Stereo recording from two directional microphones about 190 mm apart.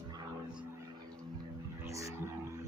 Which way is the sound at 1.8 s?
15° right (ahead or behind).